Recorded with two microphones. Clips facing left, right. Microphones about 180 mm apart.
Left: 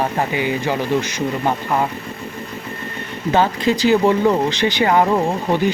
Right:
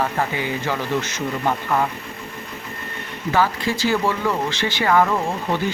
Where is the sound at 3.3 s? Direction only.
20° left (ahead or behind).